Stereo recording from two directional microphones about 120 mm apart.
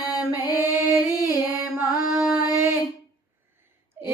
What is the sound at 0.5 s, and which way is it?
Music, 15° right (ahead or behind).